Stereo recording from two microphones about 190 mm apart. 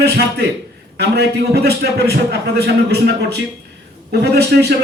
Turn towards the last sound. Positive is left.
turn(degrees=-60)  # may be behind; listen again after turning